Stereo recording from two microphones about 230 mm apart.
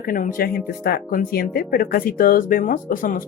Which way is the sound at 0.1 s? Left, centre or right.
Left.